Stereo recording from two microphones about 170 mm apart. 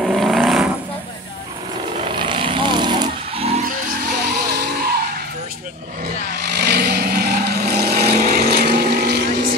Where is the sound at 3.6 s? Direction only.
60° right (ahead or behind).